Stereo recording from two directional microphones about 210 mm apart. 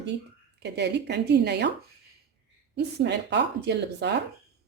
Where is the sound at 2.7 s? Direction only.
55° right (ahead or behind).